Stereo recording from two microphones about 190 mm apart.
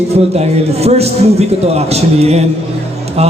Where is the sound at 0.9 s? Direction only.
35° right (ahead or behind).